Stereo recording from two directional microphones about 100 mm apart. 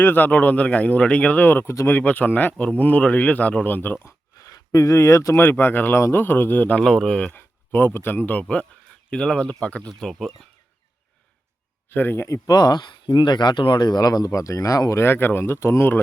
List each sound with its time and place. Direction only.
0.0 s speech: 20° left (ahead or behind)
1.7 s speech: 30° left (ahead or behind)
2.0 s speech: 15° left (ahead or behind)
4.4 s speech: 35° left (ahead or behind); by 6.8 s 15° left (ahead or behind)
6.8 s speech: 5° left (ahead or behind)
11.9 s speech: 20° left (ahead or behind)
12.5 s speech: 45° left (ahead or behind); by 16.0 s 25° left (ahead or behind)